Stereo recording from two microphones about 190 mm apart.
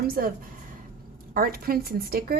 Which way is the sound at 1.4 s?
50° right (ahead or behind).